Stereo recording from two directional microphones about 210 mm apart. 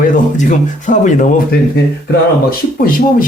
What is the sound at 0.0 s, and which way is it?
A man's voice, 40° left (ahead or behind).